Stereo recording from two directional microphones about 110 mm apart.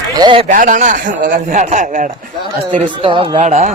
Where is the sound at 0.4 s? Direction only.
90° right.